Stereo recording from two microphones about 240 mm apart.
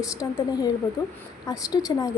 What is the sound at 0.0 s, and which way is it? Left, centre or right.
Speech, centre.